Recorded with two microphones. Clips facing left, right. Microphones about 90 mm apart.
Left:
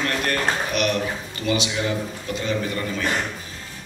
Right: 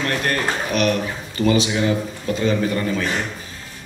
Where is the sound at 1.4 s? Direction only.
35° right (ahead or behind).